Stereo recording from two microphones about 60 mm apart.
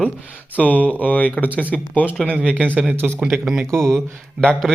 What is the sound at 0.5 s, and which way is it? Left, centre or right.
A man's voice, left.